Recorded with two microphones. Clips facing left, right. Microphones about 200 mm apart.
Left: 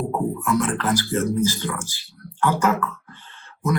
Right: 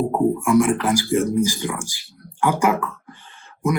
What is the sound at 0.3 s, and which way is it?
A man's voice, 10° right (ahead or behind).